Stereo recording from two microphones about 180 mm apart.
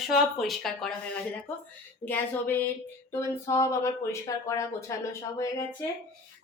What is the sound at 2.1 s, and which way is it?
A woman's voice, 10° left (ahead or behind).